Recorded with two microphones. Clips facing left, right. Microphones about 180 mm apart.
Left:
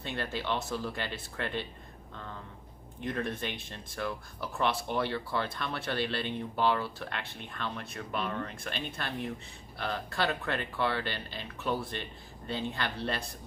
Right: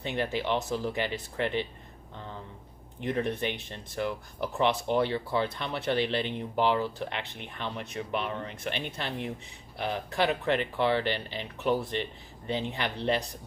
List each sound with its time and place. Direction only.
0.0 s speech: 15° right (ahead or behind)
3.1 s speech: 15° right (ahead or behind)